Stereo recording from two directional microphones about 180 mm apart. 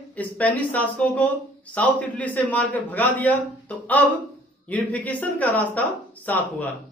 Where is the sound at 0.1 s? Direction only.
10° left (ahead or behind).